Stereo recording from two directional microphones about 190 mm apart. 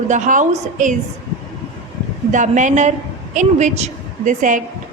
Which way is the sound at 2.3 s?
40° right (ahead or behind).